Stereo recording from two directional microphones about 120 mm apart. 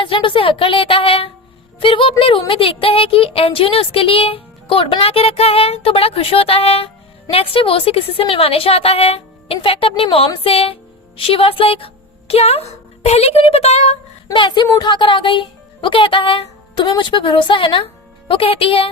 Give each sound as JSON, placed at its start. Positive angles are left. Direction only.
{"t": 0.0, "sound": "speech", "side_deg": 45}
{"t": 14.3, "sound": "speech", "side_deg": 40}